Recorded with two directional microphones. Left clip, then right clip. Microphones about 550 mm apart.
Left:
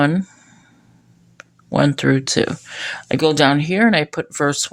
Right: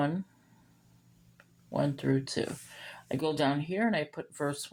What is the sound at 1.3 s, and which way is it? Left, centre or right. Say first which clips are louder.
Speech: left 14 dB; centre.